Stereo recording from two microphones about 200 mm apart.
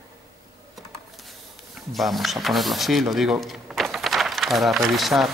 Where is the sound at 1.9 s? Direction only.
Centre (ahead or behind).